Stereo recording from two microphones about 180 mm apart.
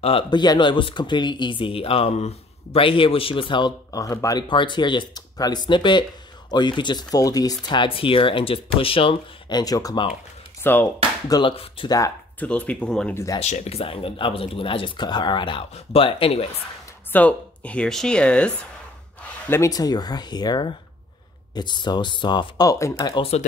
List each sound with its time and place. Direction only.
0.0 s speech: 30° left (ahead or behind)
10.6 s speech: 10° left (ahead or behind)
11.2 s speech: 25° left (ahead or behind)
12.4 s speech: 10° left (ahead or behind)
13.4 s speech: 35° left (ahead or behind)
17.1 s speech: 10° left (ahead or behind)
19.5 s speech: 20° left (ahead or behind)